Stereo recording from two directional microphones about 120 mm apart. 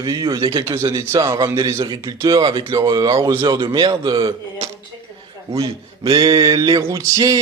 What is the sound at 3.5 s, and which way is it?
Speech, 40° right (ahead or behind).